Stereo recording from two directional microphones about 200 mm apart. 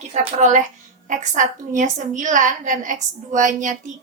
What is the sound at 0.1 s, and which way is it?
A woman's voice, 35° right (ahead or behind).